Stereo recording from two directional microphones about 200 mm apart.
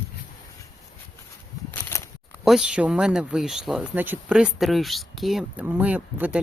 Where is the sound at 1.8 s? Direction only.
10° left (ahead or behind).